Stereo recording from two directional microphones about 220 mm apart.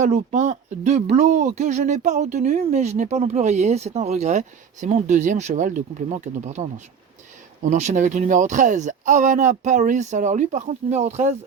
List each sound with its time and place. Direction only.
0.0 s speech: 35° right (ahead or behind)